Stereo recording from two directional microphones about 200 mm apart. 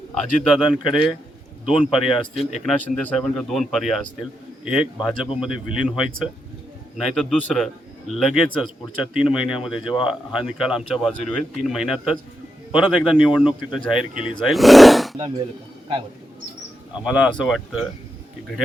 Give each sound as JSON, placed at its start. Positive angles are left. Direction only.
{"t": 0.4, "sound": "a man's voice", "side_deg": 0}
{"t": 2.3, "sound": "speech", "side_deg": 30}
{"t": 2.6, "sound": "a man's voice", "side_deg": 5}
{"t": 17.1, "sound": "a man's voice", "side_deg": -5}